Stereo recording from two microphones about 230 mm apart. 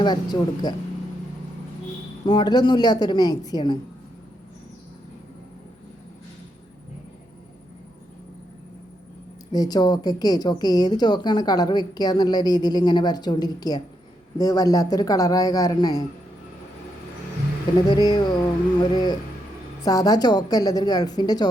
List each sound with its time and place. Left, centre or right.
0.0 s a woman's voice: centre
2.2 s a woman's voice: centre
9.5 s a woman's voice: centre
17.8 s a woman's voice: centre